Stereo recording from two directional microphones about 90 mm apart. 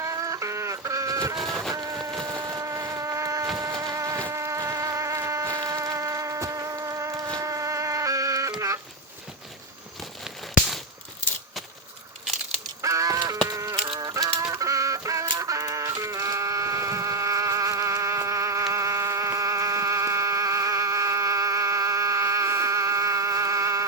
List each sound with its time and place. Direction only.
0.0 s chicken: 35° right (ahead or behind)
1.7 s insect: 40° right (ahead or behind)
5.5 s a sound: 40° right (ahead or behind)
12.8 s livestock: 40° right (ahead or behind)
14.0 s fowl: 45° right (ahead or behind)
14.5 s chicken: 35° right (ahead or behind)
15.4 s music: 35° right (ahead or behind)